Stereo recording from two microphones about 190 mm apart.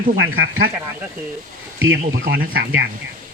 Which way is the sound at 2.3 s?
70° right (ahead or behind).